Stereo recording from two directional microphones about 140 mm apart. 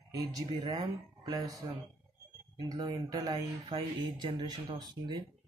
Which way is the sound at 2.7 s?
25° right (ahead or behind).